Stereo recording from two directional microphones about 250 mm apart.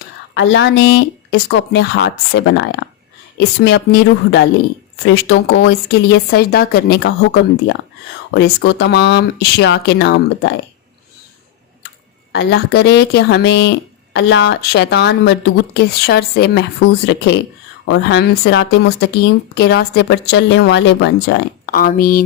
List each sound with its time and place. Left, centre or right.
0.3 s speech: left
8.3 s speech: left
12.3 s speech: left